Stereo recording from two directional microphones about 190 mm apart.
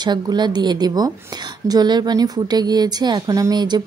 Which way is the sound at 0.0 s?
25° right (ahead or behind).